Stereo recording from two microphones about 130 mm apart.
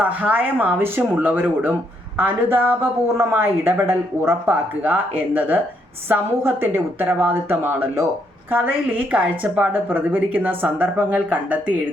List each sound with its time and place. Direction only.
0.0 s a woman's voice: 10° right (ahead or behind)